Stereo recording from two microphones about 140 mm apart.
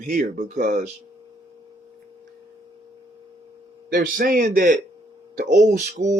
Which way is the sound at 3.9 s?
90° right.